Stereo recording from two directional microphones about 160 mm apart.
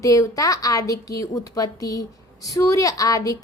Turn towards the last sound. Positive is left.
turn(degrees=20)  # may be behind; listen again after turning